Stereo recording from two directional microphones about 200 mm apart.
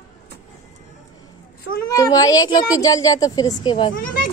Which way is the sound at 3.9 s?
45° left (ahead or behind).